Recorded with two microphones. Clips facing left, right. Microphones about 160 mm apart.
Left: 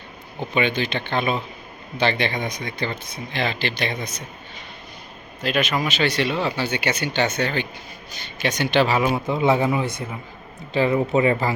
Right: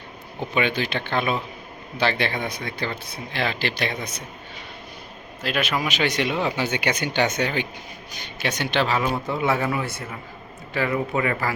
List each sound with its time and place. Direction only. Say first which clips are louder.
0.3 s speech: left 1 dB; 5° right (ahead or behind)
5.4 s a man's voice: left 2 dB; 5° right (ahead or behind); by 11.5 s 25° left (ahead or behind)